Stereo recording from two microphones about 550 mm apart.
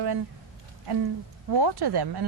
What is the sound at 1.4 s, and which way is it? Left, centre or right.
Speech, right.